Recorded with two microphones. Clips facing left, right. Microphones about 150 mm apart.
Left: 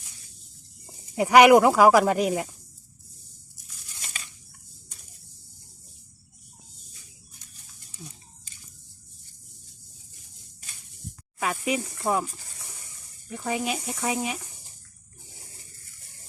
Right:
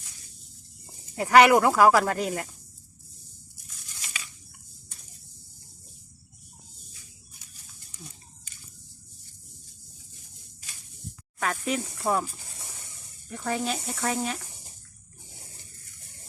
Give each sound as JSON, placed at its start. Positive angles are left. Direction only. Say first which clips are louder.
{"t": 1.1, "sound": "speech", "louder": "left 3 dB", "side_deg": 15}
{"t": 11.3, "sound": "snake", "louder": "left 1 dB", "side_deg": 10}
{"t": 11.9, "sound": "speech", "louder": "left 1 dB", "side_deg": 0}
{"t": 13.3, "sound": "speech", "louder": "left 1 dB", "side_deg": 10}